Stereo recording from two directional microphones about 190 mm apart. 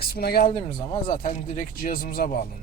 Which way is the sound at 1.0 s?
40° left (ahead or behind).